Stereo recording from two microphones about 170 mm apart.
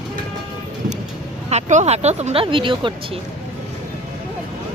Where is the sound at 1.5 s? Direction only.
45° right (ahead or behind).